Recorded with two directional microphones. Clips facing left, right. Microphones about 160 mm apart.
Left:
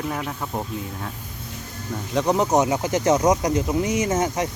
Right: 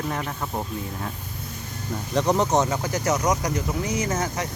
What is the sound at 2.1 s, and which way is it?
Speech, 5° left (ahead or behind).